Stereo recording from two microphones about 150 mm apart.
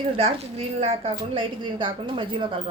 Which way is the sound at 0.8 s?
40° right (ahead or behind).